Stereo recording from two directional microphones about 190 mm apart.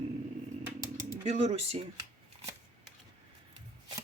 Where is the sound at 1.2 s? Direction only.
35° right (ahead or behind).